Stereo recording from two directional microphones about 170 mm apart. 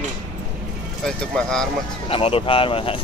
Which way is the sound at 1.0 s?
5° left (ahead or behind).